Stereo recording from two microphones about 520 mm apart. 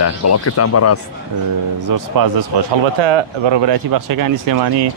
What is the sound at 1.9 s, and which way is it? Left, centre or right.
Speech, right.